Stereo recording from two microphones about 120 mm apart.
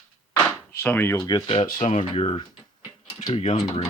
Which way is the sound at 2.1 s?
50° left (ahead or behind).